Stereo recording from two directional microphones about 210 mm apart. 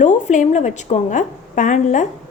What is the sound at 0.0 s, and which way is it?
A woman's voice, 35° left (ahead or behind).